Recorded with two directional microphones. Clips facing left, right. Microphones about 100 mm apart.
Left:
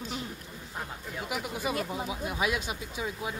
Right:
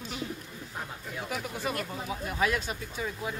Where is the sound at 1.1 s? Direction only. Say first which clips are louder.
Left 1 dB; 10° left (ahead or behind).